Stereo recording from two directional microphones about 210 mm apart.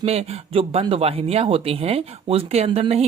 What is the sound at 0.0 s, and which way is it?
Speech, 30° right (ahead or behind).